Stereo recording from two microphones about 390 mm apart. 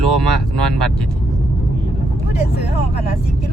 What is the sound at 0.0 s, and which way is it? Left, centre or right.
Speech, right.